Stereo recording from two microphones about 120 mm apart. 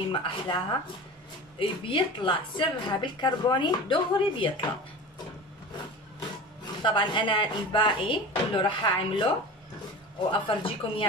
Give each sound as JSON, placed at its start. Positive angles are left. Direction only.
{"t": 0.1, "sound": "a woman's voice", "side_deg": 45}
{"t": 6.8, "sound": "speech", "side_deg": 40}
{"t": 10.3, "sound": "speech", "side_deg": 45}